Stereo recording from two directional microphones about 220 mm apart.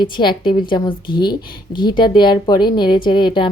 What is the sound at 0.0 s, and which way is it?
Speech, 20° left (ahead or behind).